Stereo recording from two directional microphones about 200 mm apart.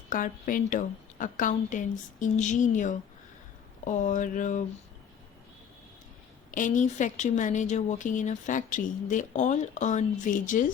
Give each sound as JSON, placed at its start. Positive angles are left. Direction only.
{"t": 0.1, "sound": "a woman's voice", "side_deg": 40}
{"t": 6.5, "sound": "a woman's voice", "side_deg": 40}